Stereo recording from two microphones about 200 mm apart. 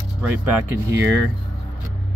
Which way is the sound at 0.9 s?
65° right (ahead or behind).